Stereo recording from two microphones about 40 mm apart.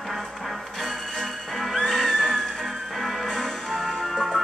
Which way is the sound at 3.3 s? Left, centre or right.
Centre.